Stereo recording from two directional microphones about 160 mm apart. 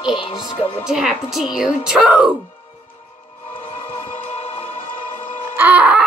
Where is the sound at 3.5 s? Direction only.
35° left (ahead or behind).